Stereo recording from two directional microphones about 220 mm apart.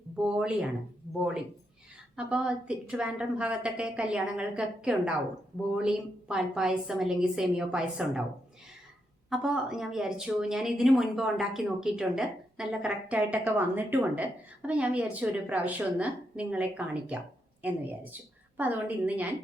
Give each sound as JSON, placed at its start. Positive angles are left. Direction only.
{"t": 0.2, "sound": "a woman's voice", "side_deg": -5}
{"t": 2.1, "sound": "a woman's voice", "side_deg": -5}
{"t": 9.3, "sound": "a woman's voice", "side_deg": 0}